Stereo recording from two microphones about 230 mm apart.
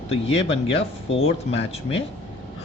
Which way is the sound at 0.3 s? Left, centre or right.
Left.